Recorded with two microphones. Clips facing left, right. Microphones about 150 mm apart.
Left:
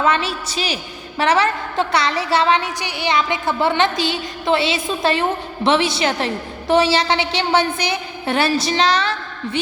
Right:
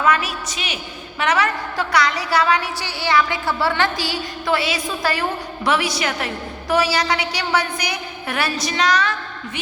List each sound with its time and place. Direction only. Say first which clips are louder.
0.0 s a woman's voice: left 1 dB; 25° left (ahead or behind)